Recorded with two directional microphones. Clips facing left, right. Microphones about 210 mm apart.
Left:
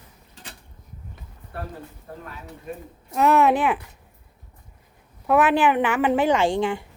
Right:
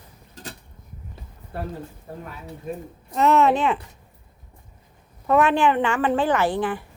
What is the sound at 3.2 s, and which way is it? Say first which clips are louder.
Speech: even; 5° left (ahead or behind).